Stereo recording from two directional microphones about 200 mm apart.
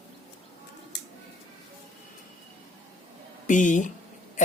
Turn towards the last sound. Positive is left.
turn(degrees=40)  # may be behind; listen again after turning